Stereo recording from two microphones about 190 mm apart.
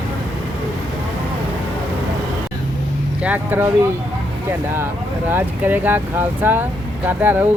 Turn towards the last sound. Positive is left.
turn(degrees=-10)  # may be behind; listen again after turning